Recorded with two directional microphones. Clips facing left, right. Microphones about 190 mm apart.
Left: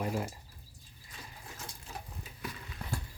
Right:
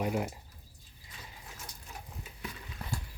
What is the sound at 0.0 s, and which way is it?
Speech, 15° right (ahead or behind).